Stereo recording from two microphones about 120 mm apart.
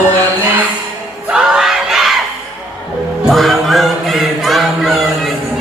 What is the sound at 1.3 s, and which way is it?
Crowd, 5° right (ahead or behind).